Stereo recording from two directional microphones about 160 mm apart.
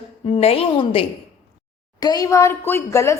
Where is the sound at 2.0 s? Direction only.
25° left (ahead or behind).